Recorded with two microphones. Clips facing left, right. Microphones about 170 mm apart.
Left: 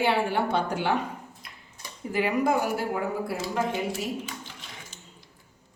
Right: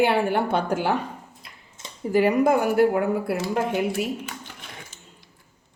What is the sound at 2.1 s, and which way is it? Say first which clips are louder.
Speech: right 6 dB; 40° right (ahead or behind).